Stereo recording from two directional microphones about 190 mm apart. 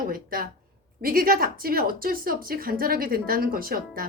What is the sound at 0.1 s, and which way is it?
A woman's voice, 50° right (ahead or behind).